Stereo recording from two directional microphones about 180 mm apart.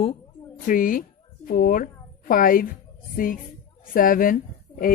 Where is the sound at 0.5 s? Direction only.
50° left (ahead or behind).